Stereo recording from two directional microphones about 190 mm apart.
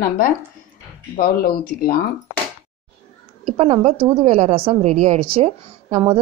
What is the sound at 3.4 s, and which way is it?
A woman's voice, 30° right (ahead or behind).